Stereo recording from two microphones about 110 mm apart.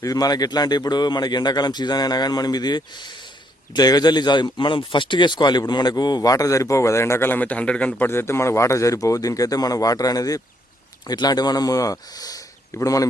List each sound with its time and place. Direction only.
0.0 s a man's voice: 35° left (ahead or behind)